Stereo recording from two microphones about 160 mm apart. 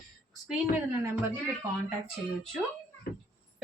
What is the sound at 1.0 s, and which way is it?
Speech, 15° right (ahead or behind).